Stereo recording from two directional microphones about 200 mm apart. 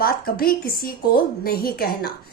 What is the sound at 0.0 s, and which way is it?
A woman's voice, 50° left (ahead or behind).